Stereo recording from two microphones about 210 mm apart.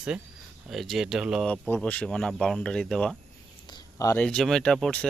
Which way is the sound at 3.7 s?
15° left (ahead or behind).